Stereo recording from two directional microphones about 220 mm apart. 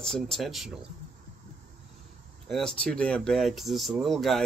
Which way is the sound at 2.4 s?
Centre (ahead or behind).